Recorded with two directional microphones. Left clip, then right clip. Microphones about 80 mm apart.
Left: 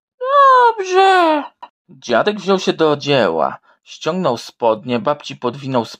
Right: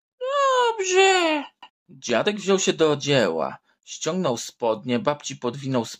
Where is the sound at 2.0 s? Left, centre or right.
Centre.